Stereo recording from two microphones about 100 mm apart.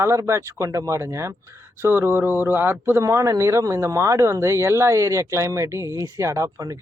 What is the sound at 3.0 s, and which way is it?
Speech, 30° right (ahead or behind).